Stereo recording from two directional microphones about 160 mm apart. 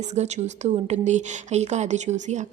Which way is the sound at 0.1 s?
45° right (ahead or behind).